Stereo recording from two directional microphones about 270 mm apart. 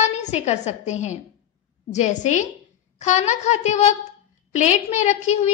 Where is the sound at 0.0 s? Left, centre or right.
Left.